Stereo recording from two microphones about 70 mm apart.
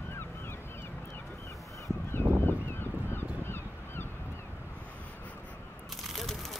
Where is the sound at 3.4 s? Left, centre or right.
Left.